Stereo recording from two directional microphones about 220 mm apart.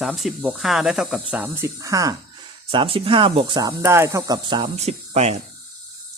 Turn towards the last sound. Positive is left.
turn(degrees=-30)  # may be behind; listen again after turning